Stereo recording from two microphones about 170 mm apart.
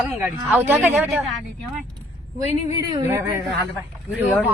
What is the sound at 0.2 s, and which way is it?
Speech, 10° right (ahead or behind).